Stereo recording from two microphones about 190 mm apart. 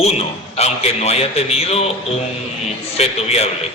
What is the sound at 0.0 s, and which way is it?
A man's voice, 35° left (ahead or behind).